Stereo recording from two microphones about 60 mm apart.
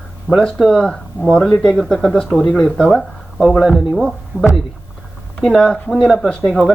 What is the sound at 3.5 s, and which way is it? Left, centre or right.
Speech, centre.